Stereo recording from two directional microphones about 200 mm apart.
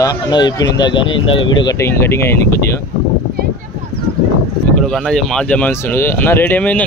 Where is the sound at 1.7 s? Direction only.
15° left (ahead or behind).